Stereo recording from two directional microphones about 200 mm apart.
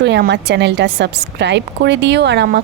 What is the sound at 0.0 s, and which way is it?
A woman's voice, 60° right (ahead or behind).